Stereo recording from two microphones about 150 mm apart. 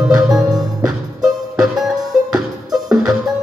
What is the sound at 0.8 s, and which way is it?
Music, 25° right (ahead or behind).